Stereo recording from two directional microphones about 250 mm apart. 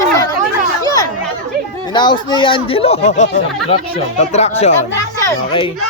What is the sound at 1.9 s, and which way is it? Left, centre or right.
A child's voice, centre.